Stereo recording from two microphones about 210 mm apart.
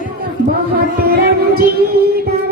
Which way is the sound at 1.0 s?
45° right (ahead or behind).